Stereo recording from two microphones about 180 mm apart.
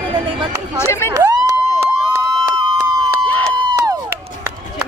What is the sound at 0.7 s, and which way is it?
Speech, 15° left (ahead or behind).